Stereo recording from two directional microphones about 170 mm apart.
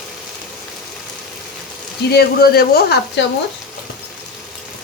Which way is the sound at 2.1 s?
70° left (ahead or behind).